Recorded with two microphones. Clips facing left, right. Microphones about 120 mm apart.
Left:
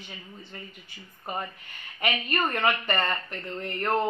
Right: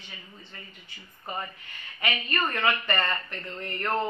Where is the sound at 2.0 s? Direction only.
20° left (ahead or behind).